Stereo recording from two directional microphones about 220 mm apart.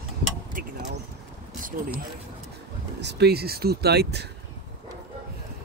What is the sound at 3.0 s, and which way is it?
Speech, 45° right (ahead or behind).